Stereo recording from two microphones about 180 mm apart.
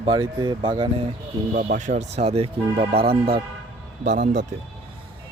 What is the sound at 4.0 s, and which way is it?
Speech, 70° right (ahead or behind).